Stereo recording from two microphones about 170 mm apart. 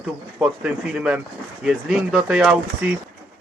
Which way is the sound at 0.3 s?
5° right (ahead or behind).